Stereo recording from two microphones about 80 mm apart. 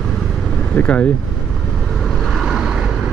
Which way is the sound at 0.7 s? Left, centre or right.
Centre.